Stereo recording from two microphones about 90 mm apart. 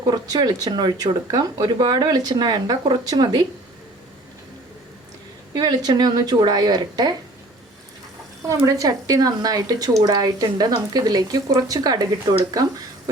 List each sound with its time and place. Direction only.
0.0 s speech: 45° right (ahead or behind)
5.5 s speech: 50° right (ahead or behind)
8.4 s speech: 40° right (ahead or behind)